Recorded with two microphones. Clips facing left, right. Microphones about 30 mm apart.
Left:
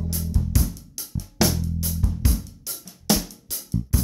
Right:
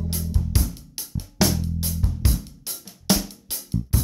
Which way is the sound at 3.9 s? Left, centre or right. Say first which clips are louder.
Left 1 dB; right.